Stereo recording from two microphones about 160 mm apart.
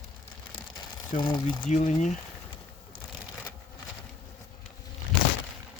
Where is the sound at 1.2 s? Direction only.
30° left (ahead or behind).